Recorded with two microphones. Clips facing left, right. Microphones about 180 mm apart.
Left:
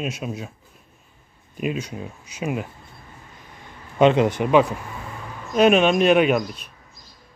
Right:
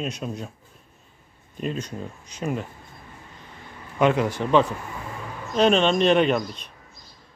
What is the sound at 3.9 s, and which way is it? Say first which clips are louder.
Speech: left 4 dB; 20° left (ahead or behind).